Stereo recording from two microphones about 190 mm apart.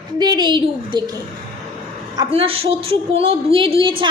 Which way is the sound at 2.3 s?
30° right (ahead or behind).